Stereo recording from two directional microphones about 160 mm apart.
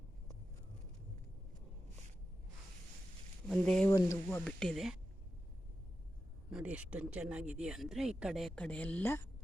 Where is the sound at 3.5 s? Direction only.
Centre (ahead or behind).